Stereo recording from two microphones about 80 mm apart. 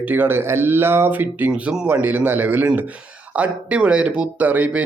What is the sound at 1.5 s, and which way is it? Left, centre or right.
Speech, centre.